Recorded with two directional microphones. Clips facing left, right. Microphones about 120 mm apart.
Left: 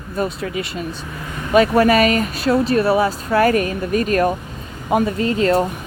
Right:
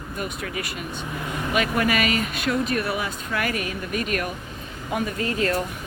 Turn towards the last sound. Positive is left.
turn(degrees=25)  # may be behind; listen again after turning